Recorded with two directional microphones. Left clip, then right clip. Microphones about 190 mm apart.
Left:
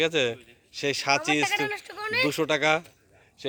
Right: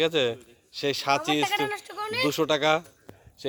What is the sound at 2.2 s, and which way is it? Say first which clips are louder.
Speech: right 2 dB; centre (ahead or behind).